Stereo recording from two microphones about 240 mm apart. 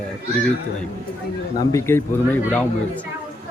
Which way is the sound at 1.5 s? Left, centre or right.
Centre.